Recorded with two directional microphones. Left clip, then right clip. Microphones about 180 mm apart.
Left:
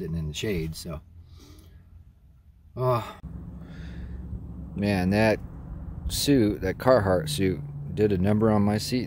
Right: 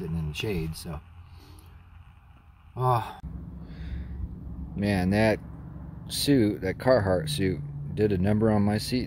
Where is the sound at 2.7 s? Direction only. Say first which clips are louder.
Even; 5° left (ahead or behind).